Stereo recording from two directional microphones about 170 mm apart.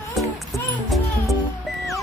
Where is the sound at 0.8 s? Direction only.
Centre (ahead or behind).